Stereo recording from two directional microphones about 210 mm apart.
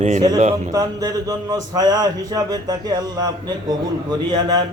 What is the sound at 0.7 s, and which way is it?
A man's voice, 15° right (ahead or behind).